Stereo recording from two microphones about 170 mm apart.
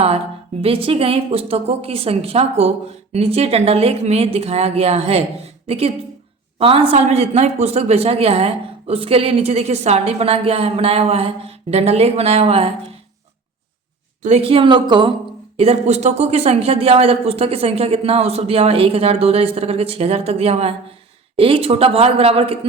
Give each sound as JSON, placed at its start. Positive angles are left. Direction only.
{"t": 0.6, "sound": "a man's voice", "side_deg": -35}
{"t": 14.2, "sound": "a man's voice", "side_deg": -40}